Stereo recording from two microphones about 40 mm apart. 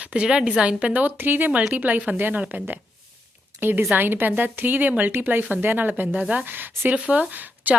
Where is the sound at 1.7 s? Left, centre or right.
Right.